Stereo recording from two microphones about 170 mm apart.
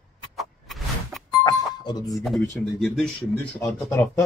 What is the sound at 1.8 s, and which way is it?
Speech, 25° left (ahead or behind).